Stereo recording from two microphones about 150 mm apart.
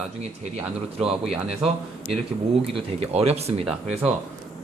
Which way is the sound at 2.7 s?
40° right (ahead or behind).